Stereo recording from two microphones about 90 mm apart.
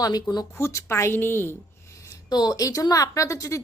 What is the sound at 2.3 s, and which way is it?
Speech, 50° left (ahead or behind).